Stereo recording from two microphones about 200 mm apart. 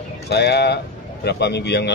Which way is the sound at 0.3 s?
55° left (ahead or behind).